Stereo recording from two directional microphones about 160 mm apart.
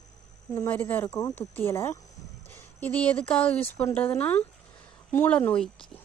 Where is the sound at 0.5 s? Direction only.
15° left (ahead or behind).